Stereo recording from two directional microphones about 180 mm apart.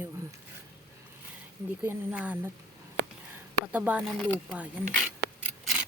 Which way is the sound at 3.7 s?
10° right (ahead or behind).